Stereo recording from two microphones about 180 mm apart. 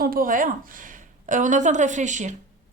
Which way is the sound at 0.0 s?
55° right (ahead or behind).